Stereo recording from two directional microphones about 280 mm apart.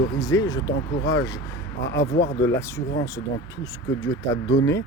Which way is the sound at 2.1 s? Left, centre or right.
Left.